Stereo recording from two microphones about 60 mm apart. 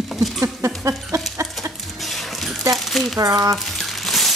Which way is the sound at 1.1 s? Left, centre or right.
Right.